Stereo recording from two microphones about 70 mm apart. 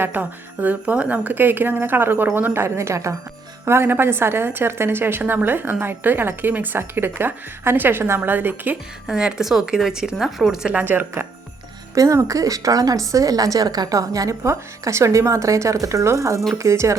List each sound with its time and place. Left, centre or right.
0.0 s a woman's voice: right
3.7 s a woman's voice: right
9.0 s speech: centre
10.8 s a woman's voice: right
11.9 s a woman's voice: right